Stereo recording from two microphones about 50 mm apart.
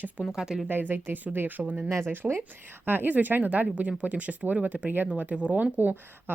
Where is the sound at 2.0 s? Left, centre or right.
Right.